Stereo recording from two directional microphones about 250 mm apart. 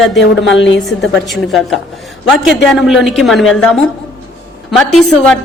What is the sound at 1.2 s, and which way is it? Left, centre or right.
A woman's voice, centre.